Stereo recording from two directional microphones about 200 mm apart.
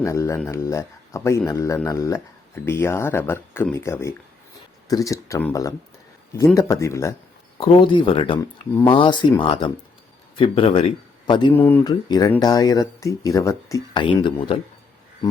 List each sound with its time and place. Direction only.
0.0 s speech: 15° left (ahead or behind)
7.6 s a man's voice: 25° left (ahead or behind)
11.5 s speech: 10° left (ahead or behind)
11.8 s speech: 20° left (ahead or behind)